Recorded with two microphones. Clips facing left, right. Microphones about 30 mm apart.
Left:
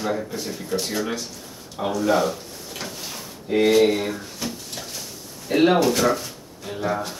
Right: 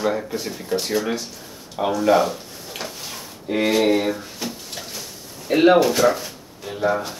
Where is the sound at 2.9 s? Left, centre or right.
Centre.